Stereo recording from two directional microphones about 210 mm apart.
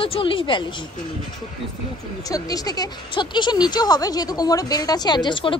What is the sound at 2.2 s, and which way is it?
Speech, 15° left (ahead or behind).